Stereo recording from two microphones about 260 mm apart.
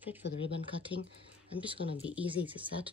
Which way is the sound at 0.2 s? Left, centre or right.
Left.